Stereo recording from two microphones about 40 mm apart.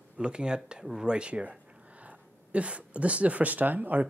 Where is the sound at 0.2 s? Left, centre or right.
Right.